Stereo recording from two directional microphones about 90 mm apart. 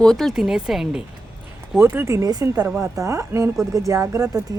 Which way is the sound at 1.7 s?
25° right (ahead or behind).